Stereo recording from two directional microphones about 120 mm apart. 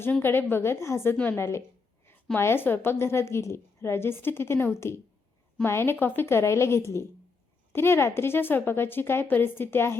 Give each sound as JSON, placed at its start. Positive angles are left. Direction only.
{"t": 0.0, "sound": "a woman's voice", "side_deg": 20}